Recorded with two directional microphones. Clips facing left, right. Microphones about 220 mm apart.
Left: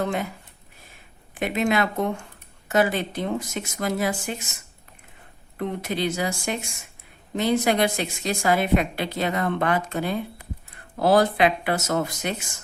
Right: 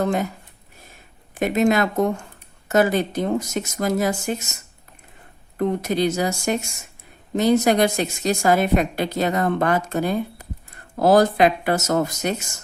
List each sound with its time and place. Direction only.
0.0 s speech: 40° right (ahead or behind)
1.4 s a woman's voice: 45° right (ahead or behind)
5.5 s a woman's voice: 40° right (ahead or behind)